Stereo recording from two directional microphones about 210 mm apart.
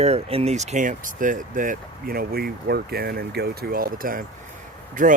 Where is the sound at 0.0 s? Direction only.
30° right (ahead or behind).